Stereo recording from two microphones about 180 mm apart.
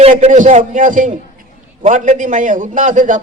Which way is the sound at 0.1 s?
45° right (ahead or behind).